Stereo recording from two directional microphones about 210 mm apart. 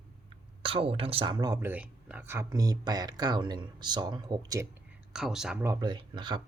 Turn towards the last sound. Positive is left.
turn(degrees=-20)  # may be behind; listen again after turning